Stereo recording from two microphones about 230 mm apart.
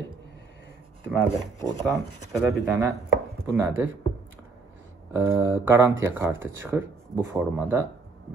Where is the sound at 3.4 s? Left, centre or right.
Centre.